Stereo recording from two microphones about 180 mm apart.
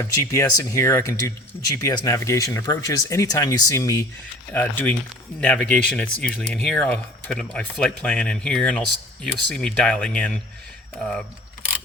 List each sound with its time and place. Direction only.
0.0 s speech: 15° left (ahead or behind)